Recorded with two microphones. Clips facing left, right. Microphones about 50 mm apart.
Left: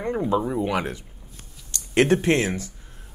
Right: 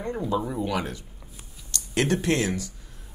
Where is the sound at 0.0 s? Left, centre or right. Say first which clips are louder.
Left 4 dB; left.